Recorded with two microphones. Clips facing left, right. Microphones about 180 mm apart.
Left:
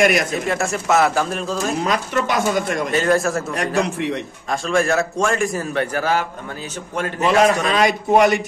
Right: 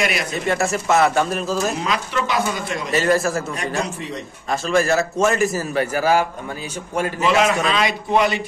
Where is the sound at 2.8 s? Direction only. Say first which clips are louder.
Right 2 dB; centre (ahead or behind).